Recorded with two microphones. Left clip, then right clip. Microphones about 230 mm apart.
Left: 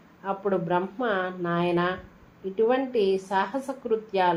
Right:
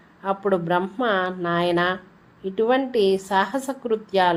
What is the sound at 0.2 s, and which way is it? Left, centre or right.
A woman's voice, right.